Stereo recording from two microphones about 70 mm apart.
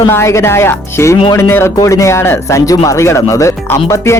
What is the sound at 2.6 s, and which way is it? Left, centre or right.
A man's voice, left.